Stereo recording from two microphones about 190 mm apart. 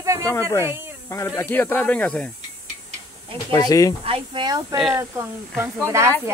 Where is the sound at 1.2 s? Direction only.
15° left (ahead or behind).